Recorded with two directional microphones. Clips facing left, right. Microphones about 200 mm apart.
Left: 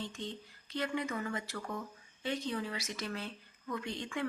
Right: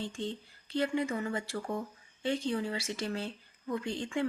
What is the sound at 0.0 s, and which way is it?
Speech, 30° right (ahead or behind).